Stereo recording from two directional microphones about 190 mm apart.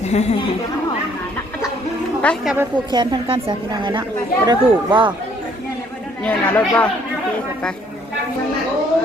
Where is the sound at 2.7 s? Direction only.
25° right (ahead or behind).